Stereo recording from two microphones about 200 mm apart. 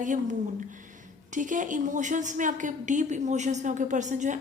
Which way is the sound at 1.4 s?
40° right (ahead or behind).